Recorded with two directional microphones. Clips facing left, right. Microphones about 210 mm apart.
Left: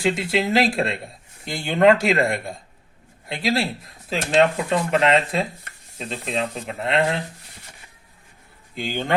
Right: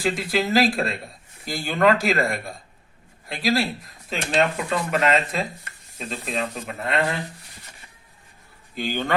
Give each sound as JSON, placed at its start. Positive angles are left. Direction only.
{"t": 0.0, "sound": "speech", "side_deg": 25}
{"t": 8.7, "sound": "speech", "side_deg": 20}